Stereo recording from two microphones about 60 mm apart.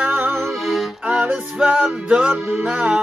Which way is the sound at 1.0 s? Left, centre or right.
Right.